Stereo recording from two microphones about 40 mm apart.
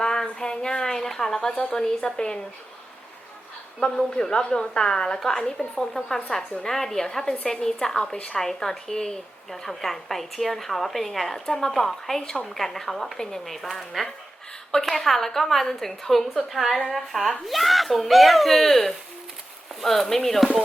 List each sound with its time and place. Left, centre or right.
0.0 s a sound: centre
1.4 s a woman's voice: left
3.8 s a woman's voice: centre